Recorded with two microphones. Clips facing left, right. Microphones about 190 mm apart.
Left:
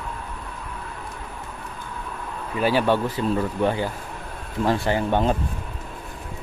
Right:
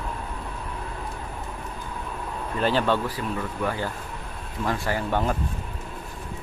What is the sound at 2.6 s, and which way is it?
Speech, 10° left (ahead or behind).